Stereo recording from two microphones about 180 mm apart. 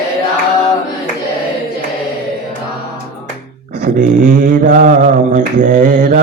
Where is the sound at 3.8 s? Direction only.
45° right (ahead or behind).